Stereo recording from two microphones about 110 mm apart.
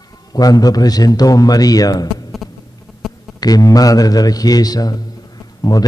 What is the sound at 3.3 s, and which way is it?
A man's voice, 35° left (ahead or behind).